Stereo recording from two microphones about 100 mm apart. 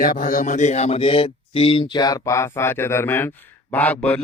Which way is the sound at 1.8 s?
40° left (ahead or behind).